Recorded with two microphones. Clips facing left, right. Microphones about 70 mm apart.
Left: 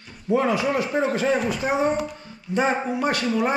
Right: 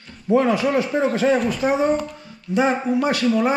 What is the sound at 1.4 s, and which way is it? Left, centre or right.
Speech, centre.